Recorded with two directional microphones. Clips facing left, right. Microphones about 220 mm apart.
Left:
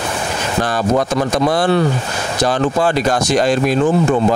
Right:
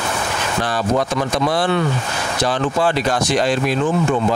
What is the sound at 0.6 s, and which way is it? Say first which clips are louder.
Speech: left 3 dB; 45° left (ahead or behind).